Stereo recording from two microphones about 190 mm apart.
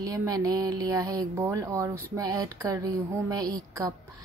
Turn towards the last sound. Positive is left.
turn(degrees=-20)  # may be behind; listen again after turning